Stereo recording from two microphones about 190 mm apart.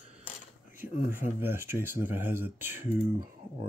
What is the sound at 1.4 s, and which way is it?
Speech, 10° right (ahead or behind).